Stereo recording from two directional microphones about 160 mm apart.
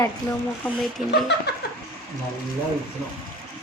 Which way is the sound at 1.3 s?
90° left.